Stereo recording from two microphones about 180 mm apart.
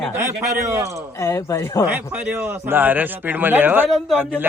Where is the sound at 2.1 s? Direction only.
10° right (ahead or behind).